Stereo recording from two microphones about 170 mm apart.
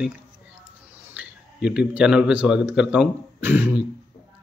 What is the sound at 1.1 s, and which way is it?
A man's voice, 5° right (ahead or behind).